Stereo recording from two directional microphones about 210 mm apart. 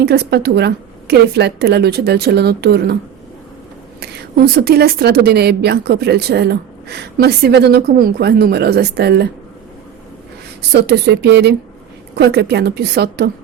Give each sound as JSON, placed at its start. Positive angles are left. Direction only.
{"t": 0.0, "sound": "a woman's voice", "side_deg": -50}
{"t": 4.0, "sound": "a woman's voice", "side_deg": -50}
{"t": 10.7, "sound": "a woman's voice", "side_deg": -50}